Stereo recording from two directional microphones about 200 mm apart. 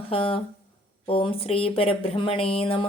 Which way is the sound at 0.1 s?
25° left (ahead or behind).